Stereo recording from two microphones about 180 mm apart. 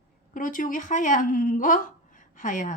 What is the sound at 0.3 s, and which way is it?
A woman's voice, 50° left (ahead or behind).